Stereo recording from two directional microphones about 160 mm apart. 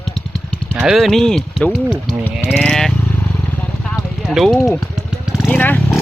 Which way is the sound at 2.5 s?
5° left (ahead or behind).